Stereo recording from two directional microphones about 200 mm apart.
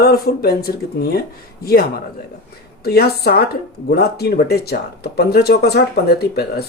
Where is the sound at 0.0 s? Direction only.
50° left (ahead or behind).